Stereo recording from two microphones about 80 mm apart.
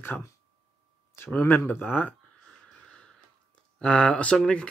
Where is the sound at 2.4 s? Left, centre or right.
Centre.